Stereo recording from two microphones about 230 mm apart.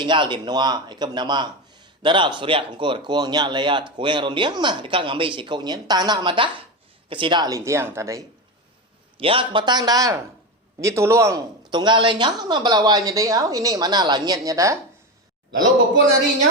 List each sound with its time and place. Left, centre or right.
0.0 s speech: centre
9.1 s speech: right